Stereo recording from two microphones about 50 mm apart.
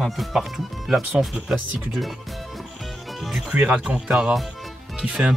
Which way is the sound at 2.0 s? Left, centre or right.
Centre.